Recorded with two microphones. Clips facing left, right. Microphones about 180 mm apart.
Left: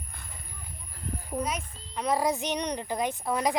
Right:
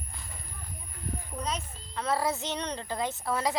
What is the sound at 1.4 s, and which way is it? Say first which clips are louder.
A woman's voice: left 1 dB; 10° left (ahead or behind).